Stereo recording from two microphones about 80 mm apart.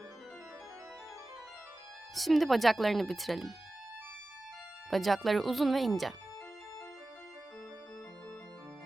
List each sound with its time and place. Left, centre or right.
2.1 s speech: centre
4.9 s speech: centre